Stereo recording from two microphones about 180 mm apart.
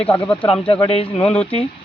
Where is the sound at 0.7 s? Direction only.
30° left (ahead or behind).